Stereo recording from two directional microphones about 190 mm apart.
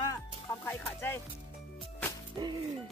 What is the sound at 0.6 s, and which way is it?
Speech, 10° left (ahead or behind).